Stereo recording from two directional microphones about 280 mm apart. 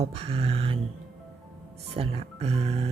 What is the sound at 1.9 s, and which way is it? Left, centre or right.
Music, right.